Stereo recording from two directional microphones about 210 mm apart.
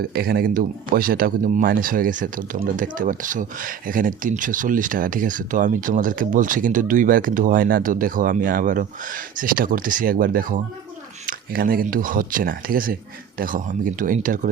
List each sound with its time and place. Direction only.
0.1 s speech: 45° right (ahead or behind)